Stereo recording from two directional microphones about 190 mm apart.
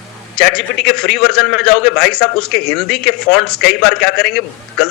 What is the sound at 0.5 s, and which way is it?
A man's voice, 5° left (ahead or behind).